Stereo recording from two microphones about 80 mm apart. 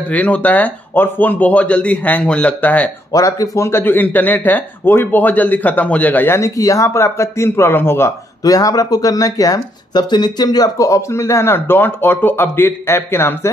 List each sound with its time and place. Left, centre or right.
0.1 s speech: centre
3.1 s speech: left
3.8 s speech: left
6.4 s speech: left
8.5 s speech: left